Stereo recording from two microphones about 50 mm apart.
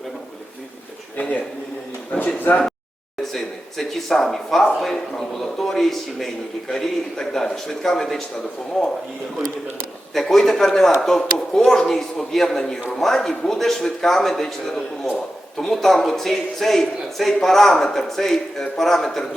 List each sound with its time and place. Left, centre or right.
1.1 s a man's voice: left
2.5 s speech: left
3.3 s a man's voice: centre
10.2 s a man's voice: centre